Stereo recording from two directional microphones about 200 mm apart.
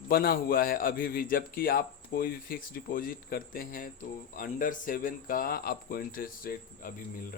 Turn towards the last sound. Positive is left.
turn(degrees=45)  # may be behind; listen again after turning